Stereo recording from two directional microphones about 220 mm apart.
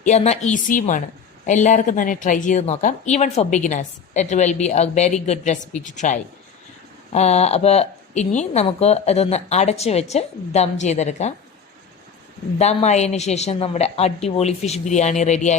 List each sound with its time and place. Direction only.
0.0 s a woman's voice: 30° left (ahead or behind)
12.5 s a woman's voice: 30° left (ahead or behind)